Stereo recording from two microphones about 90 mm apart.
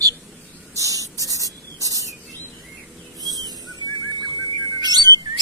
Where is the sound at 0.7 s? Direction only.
40° right (ahead or behind).